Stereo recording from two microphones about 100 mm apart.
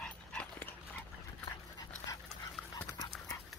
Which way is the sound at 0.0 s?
10° left (ahead or behind).